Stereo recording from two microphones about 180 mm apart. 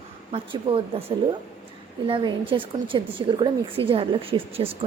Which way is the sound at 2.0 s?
30° right (ahead or behind).